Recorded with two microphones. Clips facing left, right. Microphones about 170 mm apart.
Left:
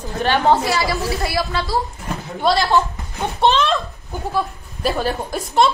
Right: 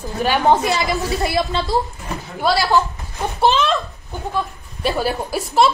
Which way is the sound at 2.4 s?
Centre (ahead or behind).